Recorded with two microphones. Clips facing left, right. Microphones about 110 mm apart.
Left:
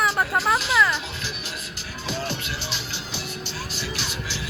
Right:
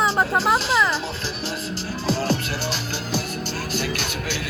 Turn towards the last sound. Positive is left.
turn(degrees=-50)  # may be behind; listen again after turning